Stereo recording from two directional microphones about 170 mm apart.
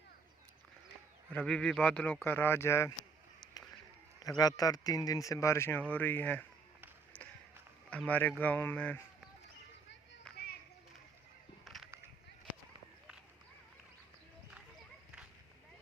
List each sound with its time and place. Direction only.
1.3 s speech: 5° left (ahead or behind)
4.2 s speech: 20° left (ahead or behind)
7.9 s speech: 5° left (ahead or behind)
10.3 s children playing: 5° left (ahead or behind)
11.6 s a sound: centre (ahead or behind)